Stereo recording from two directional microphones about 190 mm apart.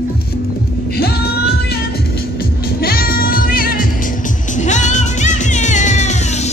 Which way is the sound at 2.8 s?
50° left (ahead or behind).